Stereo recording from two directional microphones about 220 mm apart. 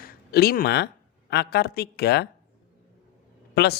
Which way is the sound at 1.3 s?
45° left (ahead or behind).